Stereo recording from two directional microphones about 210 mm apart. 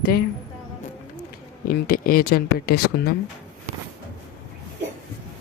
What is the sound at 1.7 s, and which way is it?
Speech, 45° left (ahead or behind).